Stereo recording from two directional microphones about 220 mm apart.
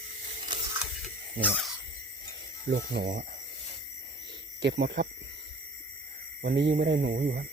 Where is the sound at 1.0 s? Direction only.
5° right (ahead or behind).